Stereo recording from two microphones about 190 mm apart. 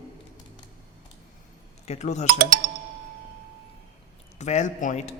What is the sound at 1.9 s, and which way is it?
Speech, 35° left (ahead or behind).